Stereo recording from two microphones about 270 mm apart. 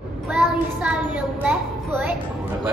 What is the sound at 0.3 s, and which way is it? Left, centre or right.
A child's voice, centre.